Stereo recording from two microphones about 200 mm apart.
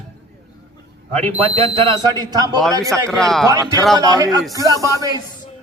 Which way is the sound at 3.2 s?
Centre (ahead or behind).